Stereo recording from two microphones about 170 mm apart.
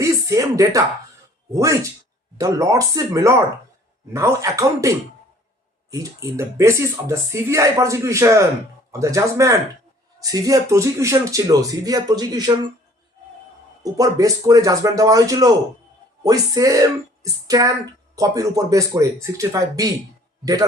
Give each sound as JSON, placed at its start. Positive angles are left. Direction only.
{"t": 0.0, "sound": "speech", "side_deg": -20}
{"t": 13.8, "sound": "speech", "side_deg": -20}